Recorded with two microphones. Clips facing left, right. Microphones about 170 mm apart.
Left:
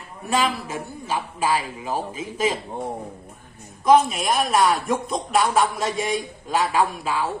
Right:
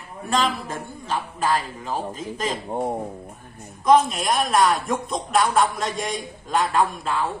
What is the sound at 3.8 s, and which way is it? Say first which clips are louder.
Speech: left 1 dB; centre (ahead or behind).